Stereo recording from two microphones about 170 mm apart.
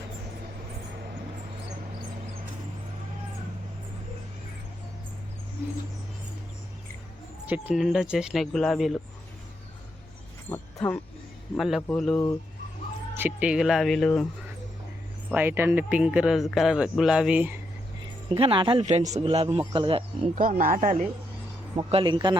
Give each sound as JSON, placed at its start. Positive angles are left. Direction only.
{"t": 7.4, "sound": "speech", "side_deg": -10}
{"t": 10.5, "sound": "speech", "side_deg": 10}
{"t": 11.5, "sound": "speech", "side_deg": 0}
{"t": 13.1, "sound": "speech", "side_deg": -10}
{"t": 15.3, "sound": "speech", "side_deg": -10}
{"t": 18.3, "sound": "a man's voice", "side_deg": -30}
{"t": 20.3, "sound": "speech", "side_deg": -55}
{"t": 21.8, "sound": "speech", "side_deg": -30}